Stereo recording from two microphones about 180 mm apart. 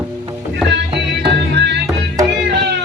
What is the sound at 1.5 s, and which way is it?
Music, 70° right (ahead or behind).